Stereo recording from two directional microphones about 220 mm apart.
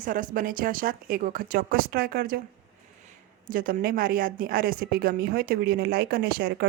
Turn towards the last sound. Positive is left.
turn(degrees=-45)  # may be behind; listen again after turning